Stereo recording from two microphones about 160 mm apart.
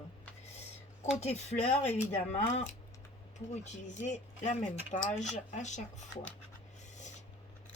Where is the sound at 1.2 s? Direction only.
45° left (ahead or behind).